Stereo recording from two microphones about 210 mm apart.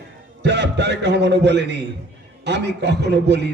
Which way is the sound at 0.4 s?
55° right (ahead or behind).